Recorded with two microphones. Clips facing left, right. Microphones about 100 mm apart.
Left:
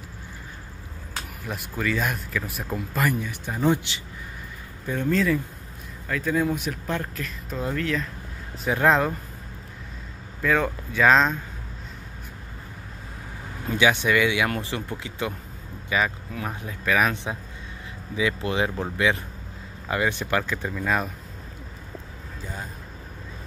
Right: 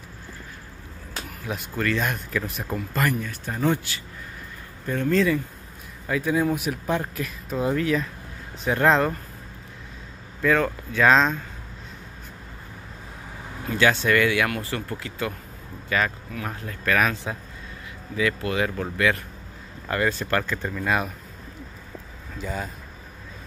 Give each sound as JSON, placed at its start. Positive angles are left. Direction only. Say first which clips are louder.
{"t": 1.4, "sound": "speech", "louder": "right 2 dB", "side_deg": 0}
{"t": 3.2, "sound": "speech", "louder": "even", "side_deg": 15}
{"t": 5.1, "sound": "speech", "louder": "right 2 dB", "side_deg": 0}
{"t": 6.0, "sound": "speech", "louder": "right 1 dB", "side_deg": -15}
{"t": 8.6, "sound": "speech", "louder": "right 1 dB", "side_deg": 5}
{"t": 10.4, "sound": "speech", "louder": "right 2 dB", "side_deg": 5}
{"t": 13.7, "sound": "speech", "louder": "even", "side_deg": 10}
{"t": 17.1, "sound": "speech", "louder": "even", "side_deg": 20}
{"t": 18.4, "sound": "speech", "louder": "even", "side_deg": 25}
{"t": 22.4, "sound": "speech", "louder": "right 6 dB", "side_deg": -90}